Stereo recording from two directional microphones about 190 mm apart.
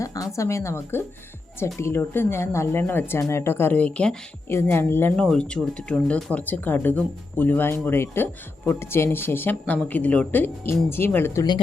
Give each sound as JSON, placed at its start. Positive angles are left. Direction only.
{"t": 0.0, "sound": "speech", "side_deg": 20}